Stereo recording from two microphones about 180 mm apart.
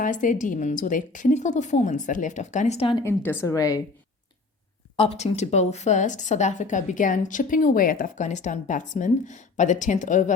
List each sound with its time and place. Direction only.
0.0 s a woman's voice: 45° left (ahead or behind)
3.0 s a woman's voice: 15° left (ahead or behind)
4.9 s a woman's voice: 35° left (ahead or behind)